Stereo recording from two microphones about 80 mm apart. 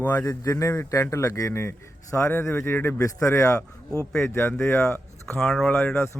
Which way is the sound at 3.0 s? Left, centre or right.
Left.